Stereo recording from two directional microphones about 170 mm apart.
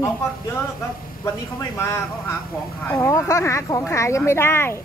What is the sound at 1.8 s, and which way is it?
Speech, 15° left (ahead or behind).